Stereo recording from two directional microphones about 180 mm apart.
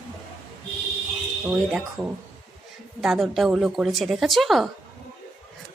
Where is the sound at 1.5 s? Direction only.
5° right (ahead or behind).